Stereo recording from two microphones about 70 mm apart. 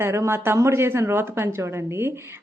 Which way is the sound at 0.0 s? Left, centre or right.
Right.